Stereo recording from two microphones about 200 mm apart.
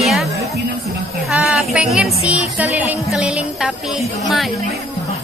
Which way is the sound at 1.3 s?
5° right (ahead or behind).